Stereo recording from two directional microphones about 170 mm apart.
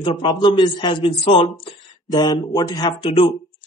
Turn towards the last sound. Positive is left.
turn(degrees=30)  # may be behind; listen again after turning